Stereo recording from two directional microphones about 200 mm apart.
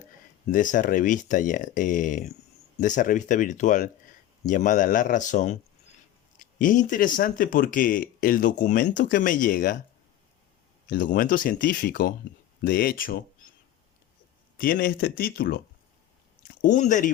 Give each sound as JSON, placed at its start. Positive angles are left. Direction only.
{"t": 0.5, "sound": "speech", "side_deg": 40}
{"t": 10.8, "sound": "speech", "side_deg": 40}
{"t": 14.6, "sound": "speech", "side_deg": 45}
{"t": 16.6, "sound": "speech", "side_deg": 40}